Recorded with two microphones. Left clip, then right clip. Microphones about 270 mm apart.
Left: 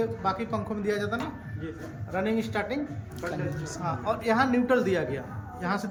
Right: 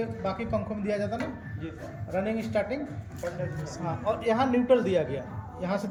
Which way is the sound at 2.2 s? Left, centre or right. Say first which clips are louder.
Even; centre.